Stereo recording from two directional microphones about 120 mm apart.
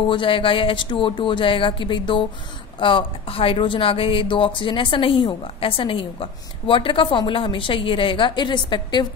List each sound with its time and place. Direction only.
0.1 s speech: 45° left (ahead or behind)